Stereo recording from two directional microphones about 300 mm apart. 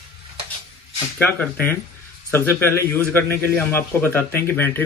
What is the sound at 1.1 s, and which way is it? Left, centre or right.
A man's voice, centre.